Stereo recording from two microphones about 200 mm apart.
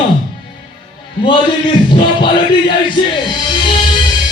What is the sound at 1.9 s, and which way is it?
Music, 25° left (ahead or behind).